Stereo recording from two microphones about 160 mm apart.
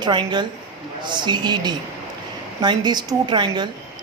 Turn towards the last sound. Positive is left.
turn(degrees=-30)  # may be behind; listen again after turning